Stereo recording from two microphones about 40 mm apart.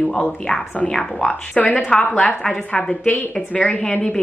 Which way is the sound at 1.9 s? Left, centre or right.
Centre.